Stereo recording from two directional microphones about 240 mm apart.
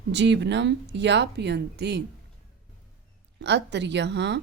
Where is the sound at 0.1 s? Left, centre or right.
Right.